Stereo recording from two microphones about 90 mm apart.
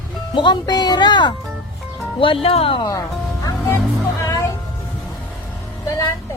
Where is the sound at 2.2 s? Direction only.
90° left.